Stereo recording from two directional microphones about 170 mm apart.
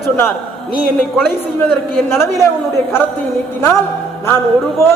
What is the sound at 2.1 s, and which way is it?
Speech, 15° left (ahead or behind).